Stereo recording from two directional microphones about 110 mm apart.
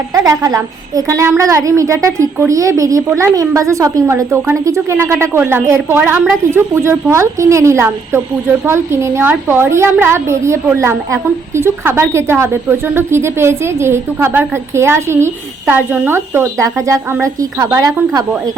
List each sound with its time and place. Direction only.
0.1 s a woman's voice: 30° right (ahead or behind)